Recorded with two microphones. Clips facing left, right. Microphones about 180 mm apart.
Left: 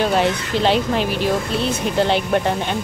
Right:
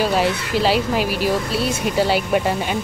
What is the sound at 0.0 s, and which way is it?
Speech, 5° right (ahead or behind).